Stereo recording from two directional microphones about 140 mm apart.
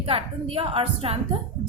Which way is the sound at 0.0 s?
45° right (ahead or behind).